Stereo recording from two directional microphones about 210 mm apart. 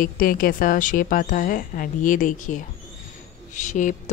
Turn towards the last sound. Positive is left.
turn(degrees=35)  # may be behind; listen again after turning